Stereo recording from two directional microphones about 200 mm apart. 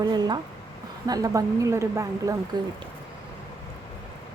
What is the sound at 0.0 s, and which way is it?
Speech, 20° right (ahead or behind).